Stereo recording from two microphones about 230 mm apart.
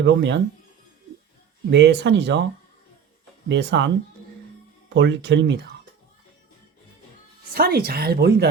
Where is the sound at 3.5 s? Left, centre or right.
Right.